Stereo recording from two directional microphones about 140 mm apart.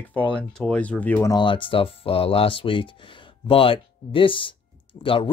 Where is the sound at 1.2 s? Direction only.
35° left (ahead or behind).